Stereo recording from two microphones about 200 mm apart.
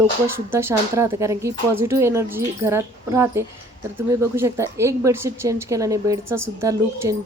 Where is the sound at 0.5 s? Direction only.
15° right (ahead or behind).